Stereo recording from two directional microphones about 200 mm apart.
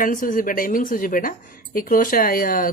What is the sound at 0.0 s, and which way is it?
A woman's voice, 40° left (ahead or behind).